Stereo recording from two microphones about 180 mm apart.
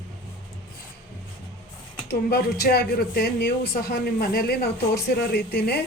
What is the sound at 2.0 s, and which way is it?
Speech, 60° left (ahead or behind).